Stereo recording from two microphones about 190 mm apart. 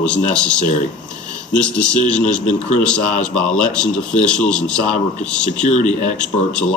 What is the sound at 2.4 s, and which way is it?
Speech, 40° left (ahead or behind).